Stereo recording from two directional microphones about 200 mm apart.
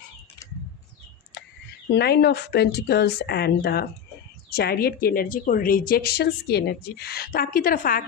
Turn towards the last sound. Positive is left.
turn(degrees=45)  # may be behind; listen again after turning